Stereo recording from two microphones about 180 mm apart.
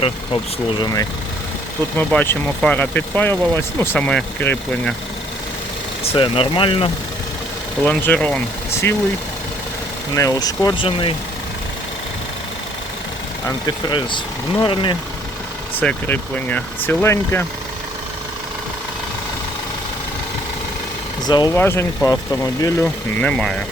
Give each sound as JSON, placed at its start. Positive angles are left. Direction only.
{"t": 0.8, "sound": "speech", "side_deg": 20}
{"t": 2.0, "sound": "speech", "side_deg": 10}
{"t": 6.0, "sound": "speech", "side_deg": 30}
{"t": 7.9, "sound": "speech", "side_deg": 10}
{"t": 10.2, "sound": "speech", "side_deg": 20}
{"t": 13.7, "sound": "speech", "side_deg": 25}
{"t": 15.7, "sound": "speech", "side_deg": 10}
{"t": 21.2, "sound": "speech", "side_deg": 20}